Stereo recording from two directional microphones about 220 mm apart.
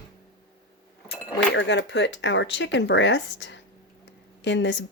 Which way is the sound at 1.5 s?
55° left (ahead or behind).